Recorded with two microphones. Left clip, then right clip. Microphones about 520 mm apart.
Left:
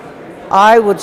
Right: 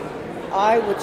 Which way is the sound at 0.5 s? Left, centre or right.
Left.